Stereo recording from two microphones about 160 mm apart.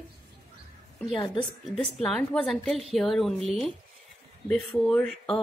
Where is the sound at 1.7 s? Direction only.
Centre (ahead or behind).